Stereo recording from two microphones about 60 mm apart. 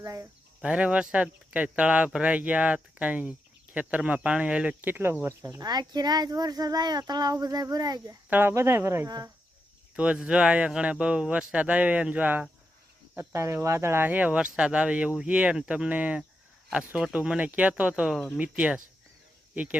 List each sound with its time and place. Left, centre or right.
0.0 s speech: right
0.6 s speech: centre
4.8 s speech: right
6.2 s speech: right
8.3 s speech: right
8.5 s speech: right
9.0 s speech: right
9.9 s speech: centre
13.1 s speech: right
14.0 s speech: right; by 15.9 s centre
15.9 s speech: right